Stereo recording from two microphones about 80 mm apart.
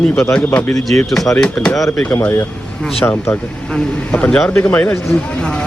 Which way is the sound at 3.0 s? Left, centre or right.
Left.